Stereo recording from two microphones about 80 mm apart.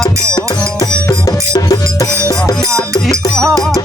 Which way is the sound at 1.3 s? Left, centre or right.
Left.